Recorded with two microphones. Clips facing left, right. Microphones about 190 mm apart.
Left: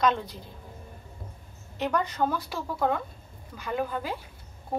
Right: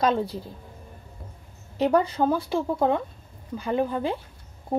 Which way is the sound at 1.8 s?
30° right (ahead or behind).